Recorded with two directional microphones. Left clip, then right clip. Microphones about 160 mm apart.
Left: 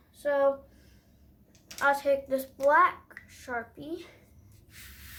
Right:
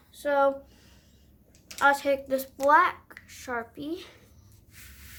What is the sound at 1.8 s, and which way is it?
A woman's voice, 50° right (ahead or behind).